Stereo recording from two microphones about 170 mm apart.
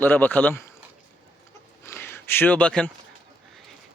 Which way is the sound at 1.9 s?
15° left (ahead or behind).